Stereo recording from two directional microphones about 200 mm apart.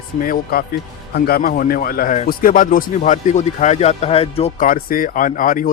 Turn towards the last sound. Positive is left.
turn(degrees=40)  # may be behind; listen again after turning